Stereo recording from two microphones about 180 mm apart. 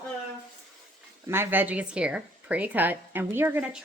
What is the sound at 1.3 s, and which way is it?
Speech, 10° right (ahead or behind).